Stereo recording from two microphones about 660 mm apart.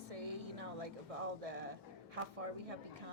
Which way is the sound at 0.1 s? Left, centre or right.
Right.